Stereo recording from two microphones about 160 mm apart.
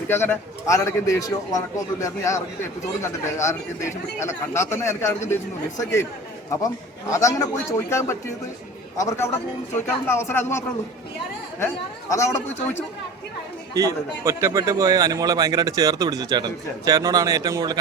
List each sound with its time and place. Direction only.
0.1 s a man's voice: 15° left (ahead or behind)
7.1 s a man's voice: 20° left (ahead or behind)
11.6 s a man's voice: 20° left (ahead or behind)
13.7 s a man's voice: 20° right (ahead or behind)